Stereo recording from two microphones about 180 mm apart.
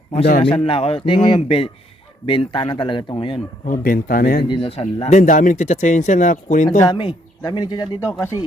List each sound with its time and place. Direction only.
0.4 s speech: 30° left (ahead or behind)
3.7 s speech: 50° left (ahead or behind)
4.4 s speech: 30° left (ahead or behind); by 6.7 s 45° left (ahead or behind)
6.8 s speech: 25° left (ahead or behind)